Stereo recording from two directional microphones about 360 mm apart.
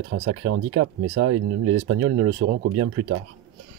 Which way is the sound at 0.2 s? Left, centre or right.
Right.